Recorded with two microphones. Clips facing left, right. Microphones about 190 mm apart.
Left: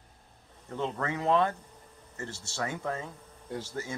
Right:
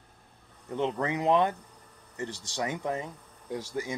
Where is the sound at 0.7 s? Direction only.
15° right (ahead or behind).